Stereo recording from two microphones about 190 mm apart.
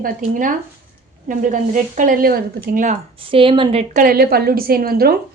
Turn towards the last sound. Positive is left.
turn(degrees=-50)  # may be behind; listen again after turning